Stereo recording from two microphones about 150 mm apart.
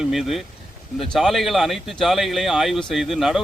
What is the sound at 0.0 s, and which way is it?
A man's voice, centre (ahead or behind).